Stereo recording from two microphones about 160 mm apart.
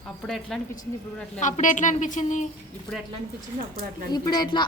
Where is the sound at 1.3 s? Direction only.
50° left (ahead or behind).